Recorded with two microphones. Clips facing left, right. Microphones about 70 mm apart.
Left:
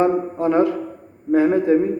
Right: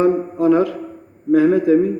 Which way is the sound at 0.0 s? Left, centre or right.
Left.